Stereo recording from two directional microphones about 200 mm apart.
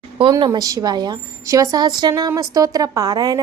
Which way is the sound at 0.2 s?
25° right (ahead or behind).